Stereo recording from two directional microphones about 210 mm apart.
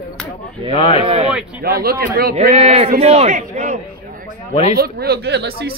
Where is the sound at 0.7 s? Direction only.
25° left (ahead or behind).